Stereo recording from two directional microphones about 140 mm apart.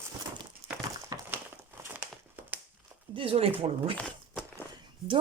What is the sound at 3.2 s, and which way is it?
Speech, 45° right (ahead or behind).